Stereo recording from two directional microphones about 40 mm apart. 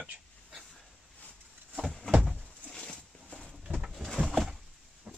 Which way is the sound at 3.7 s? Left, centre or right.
Right.